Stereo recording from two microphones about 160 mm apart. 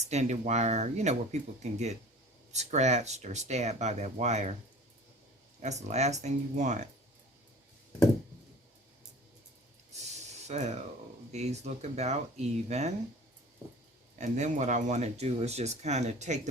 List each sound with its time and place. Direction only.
0.1 s speech: 45° right (ahead or behind)
5.6 s speech: 45° right (ahead or behind)
10.2 s a sound: 45° right (ahead or behind)
11.3 s speech: 45° right (ahead or behind)
14.2 s speech: 50° right (ahead or behind)